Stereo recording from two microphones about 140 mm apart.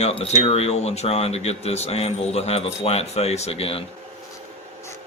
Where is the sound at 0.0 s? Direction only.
45° left (ahead or behind).